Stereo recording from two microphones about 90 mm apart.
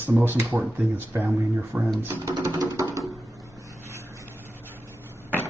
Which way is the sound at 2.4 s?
40° right (ahead or behind).